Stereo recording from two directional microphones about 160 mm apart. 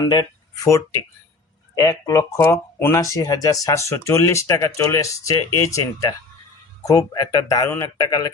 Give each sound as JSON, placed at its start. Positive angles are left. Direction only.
{"t": 0.1, "sound": "speech", "side_deg": 25}